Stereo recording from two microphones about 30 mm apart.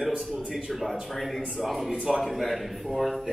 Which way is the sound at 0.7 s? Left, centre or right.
Centre.